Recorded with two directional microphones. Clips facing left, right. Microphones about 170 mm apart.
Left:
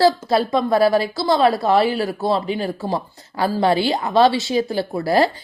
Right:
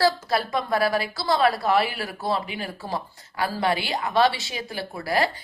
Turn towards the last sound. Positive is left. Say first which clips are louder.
# left 7 dB
turn(degrees=30)  # may be behind; listen again after turning